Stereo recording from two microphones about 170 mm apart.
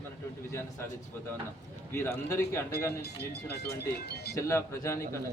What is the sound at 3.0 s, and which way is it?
Speech, 75° left (ahead or behind).